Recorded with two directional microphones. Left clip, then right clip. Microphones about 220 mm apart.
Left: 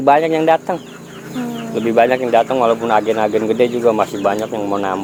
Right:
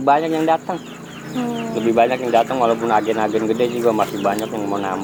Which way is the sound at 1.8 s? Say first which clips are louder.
Left 3 dB; 40° left (ahead or behind).